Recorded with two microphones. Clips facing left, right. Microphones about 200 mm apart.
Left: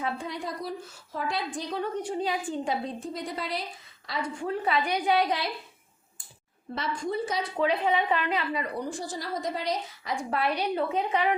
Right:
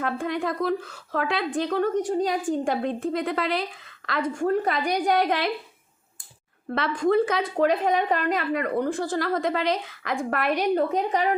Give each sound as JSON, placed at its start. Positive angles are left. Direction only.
{"t": 0.0, "sound": "a woman's voice", "side_deg": -55}
{"t": 0.6, "sound": "a woman's voice", "side_deg": -85}
{"t": 4.2, "sound": "a woman's voice", "side_deg": -50}
{"t": 6.7, "sound": "a woman's voice", "side_deg": -65}